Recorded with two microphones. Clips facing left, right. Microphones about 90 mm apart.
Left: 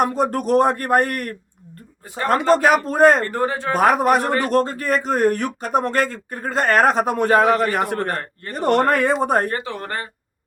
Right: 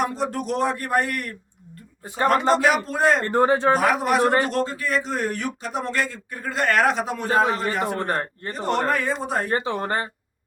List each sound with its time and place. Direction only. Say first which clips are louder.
0.0 s a man's voice: left 5 dB; 45° left (ahead or behind)
2.6 s a man's voice: left 5 dB; 45° left (ahead or behind)
3.2 s a man's voice: right 4 dB; 25° right (ahead or behind)
3.8 s a man's voice: left 4 dB; 45° left (ahead or behind)
7.9 s a man's voice: left 1 dB; 25° right (ahead or behind)
8.5 s speech: left 6 dB; 60° left (ahead or behind)
9.5 s a man's voice: right 3 dB; 25° right (ahead or behind)